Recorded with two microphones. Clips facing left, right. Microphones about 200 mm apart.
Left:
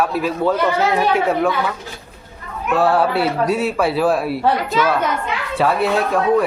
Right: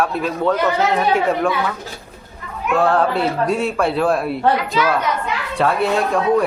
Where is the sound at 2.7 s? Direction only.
5° left (ahead or behind).